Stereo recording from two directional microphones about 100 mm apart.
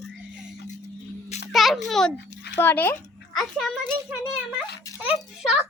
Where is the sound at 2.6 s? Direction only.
25° left (ahead or behind).